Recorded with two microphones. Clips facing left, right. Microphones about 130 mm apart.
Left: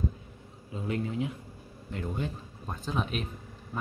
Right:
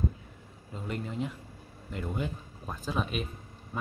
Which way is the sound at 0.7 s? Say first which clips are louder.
Left 3 dB; 5° left (ahead or behind).